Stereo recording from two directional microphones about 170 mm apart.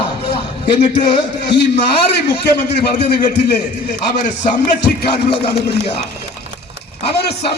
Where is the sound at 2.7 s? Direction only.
75° left (ahead or behind).